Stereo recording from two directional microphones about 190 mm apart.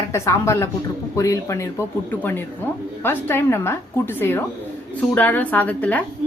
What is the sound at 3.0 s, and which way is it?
A woman's voice, 10° left (ahead or behind).